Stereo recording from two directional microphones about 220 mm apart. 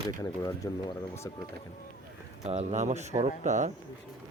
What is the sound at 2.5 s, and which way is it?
Speech, 30° right (ahead or behind).